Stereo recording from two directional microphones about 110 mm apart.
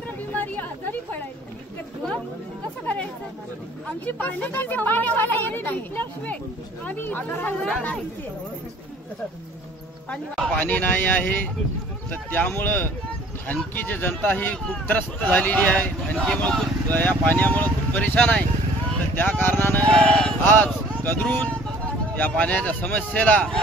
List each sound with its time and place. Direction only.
0.3 s a sound: 15° left (ahead or behind)
4.0 s speech: 15° left (ahead or behind)
10.1 s speech: 10° left (ahead or behind)